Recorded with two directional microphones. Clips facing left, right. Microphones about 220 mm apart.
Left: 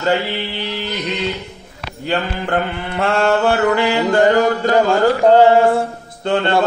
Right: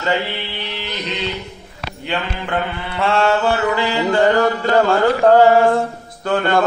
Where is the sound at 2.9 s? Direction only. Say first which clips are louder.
Left 1 dB; 45° left (ahead or behind).